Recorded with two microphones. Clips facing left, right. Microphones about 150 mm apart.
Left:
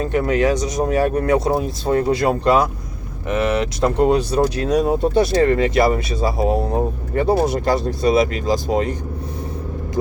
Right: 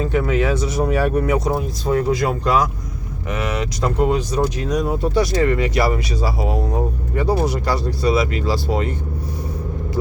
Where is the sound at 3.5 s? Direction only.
60° left (ahead or behind).